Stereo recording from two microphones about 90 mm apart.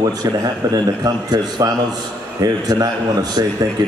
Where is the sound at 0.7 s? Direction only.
45° right (ahead or behind).